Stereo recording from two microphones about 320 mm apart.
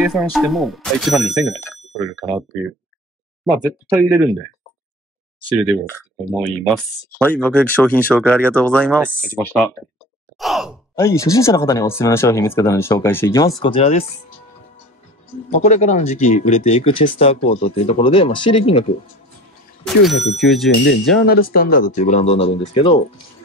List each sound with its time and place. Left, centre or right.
0.0 s speech: centre
3.9 s speech: centre
5.7 s speech: centre
10.4 s sigh: centre
11.0 s speech: centre
15.5 s speech: left
20.0 s speech: centre
20.8 s speech: left; by 23.2 s centre